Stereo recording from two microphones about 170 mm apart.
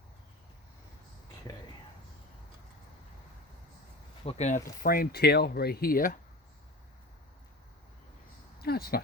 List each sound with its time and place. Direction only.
4.2 s speech: 40° left (ahead or behind)
4.8 s speech: 60° left (ahead or behind)
8.6 s a sound: 65° left (ahead or behind)